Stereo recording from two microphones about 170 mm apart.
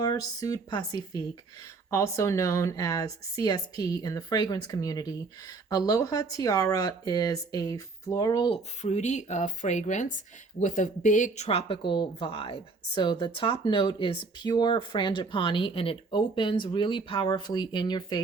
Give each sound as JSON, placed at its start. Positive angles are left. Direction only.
{"t": 0.0, "sound": "speech", "side_deg": 20}
{"t": 8.8, "sound": "speech", "side_deg": 45}